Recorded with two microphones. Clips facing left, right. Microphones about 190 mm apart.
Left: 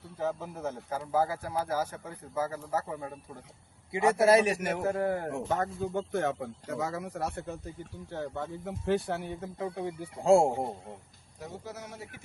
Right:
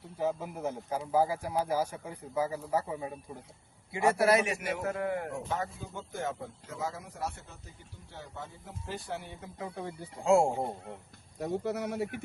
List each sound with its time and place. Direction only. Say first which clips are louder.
0.2 s speech: right 1 dB; 10° right (ahead or behind)
3.9 s speech: left 3 dB; 20° left (ahead or behind); by 4.8 s 45° left (ahead or behind)
4.8 s speech: left 3 dB; 35° left (ahead or behind)
5.5 s speech: left 5 dB; 55° left (ahead or behind)
9.7 s speech: left 4 dB; 15° left (ahead or behind)
10.2 s speech: left 2 dB; 30° left (ahead or behind)
11.3 s speech: right 9 dB; 60° right (ahead or behind)